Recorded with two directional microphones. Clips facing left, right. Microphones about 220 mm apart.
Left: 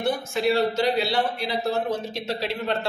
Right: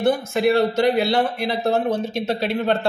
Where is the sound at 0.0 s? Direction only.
55° right (ahead or behind).